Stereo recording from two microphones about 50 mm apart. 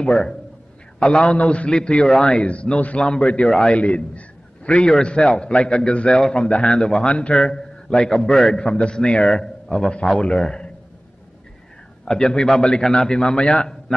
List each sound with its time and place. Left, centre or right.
0.0 s a man's voice: centre
1.8 s a man's voice: centre
2.4 s a man's voice: left
3.7 s a man's voice: left
12.0 s a man's voice: centre